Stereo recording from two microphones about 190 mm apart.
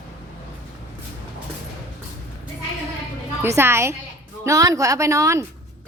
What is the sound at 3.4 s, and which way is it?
A woman's voice, 15° right (ahead or behind).